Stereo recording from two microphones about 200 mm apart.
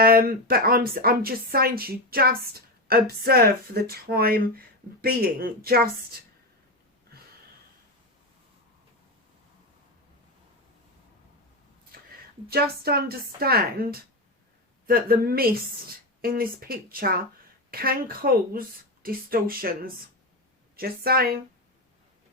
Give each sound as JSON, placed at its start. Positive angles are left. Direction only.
{"t": 0.0, "sound": "speech", "side_deg": -45}
{"t": 12.5, "sound": "speech", "side_deg": -50}